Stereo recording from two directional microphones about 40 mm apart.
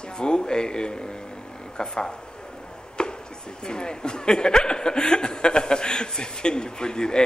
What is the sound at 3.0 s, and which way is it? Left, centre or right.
Chop, left.